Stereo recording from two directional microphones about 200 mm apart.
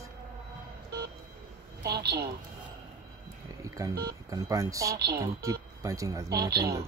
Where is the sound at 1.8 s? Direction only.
55° right (ahead or behind).